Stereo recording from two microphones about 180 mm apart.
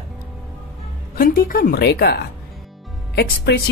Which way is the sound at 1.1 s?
55° left (ahead or behind).